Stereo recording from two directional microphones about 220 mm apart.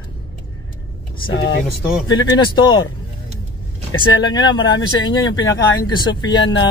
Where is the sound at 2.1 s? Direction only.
20° left (ahead or behind).